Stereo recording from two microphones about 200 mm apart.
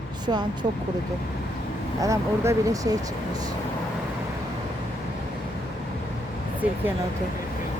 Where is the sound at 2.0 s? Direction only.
15° right (ahead or behind).